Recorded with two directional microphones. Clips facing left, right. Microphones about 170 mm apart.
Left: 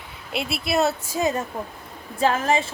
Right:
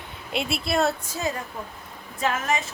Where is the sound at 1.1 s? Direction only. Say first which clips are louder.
Left 6 dB; 20° left (ahead or behind).